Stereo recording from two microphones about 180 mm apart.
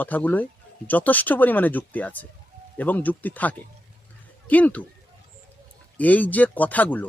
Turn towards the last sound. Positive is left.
turn(degrees=10)  # may be behind; listen again after turning